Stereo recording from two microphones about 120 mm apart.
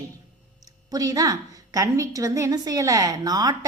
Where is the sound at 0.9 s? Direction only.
30° right (ahead or behind).